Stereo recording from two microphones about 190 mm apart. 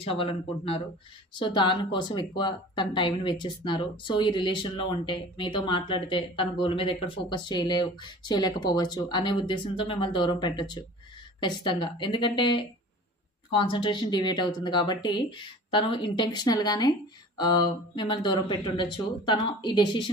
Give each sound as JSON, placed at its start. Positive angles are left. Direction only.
{"t": 0.0, "sound": "speech", "side_deg": 30}